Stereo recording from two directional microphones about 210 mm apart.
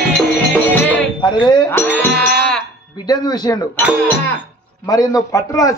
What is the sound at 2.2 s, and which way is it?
Music, centre (ahead or behind).